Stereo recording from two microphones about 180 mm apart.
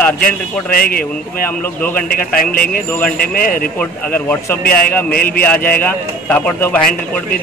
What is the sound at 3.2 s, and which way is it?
Speech, 50° left (ahead or behind).